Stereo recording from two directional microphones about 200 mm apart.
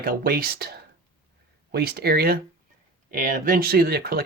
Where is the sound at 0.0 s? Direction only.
45° right (ahead or behind).